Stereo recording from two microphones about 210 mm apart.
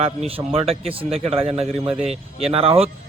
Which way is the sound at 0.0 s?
30° right (ahead or behind).